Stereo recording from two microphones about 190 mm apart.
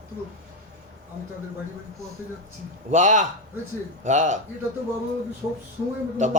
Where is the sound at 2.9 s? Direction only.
40° right (ahead or behind).